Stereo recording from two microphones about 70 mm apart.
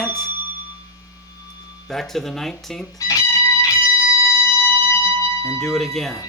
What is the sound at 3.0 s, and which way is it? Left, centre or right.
Guitar, left.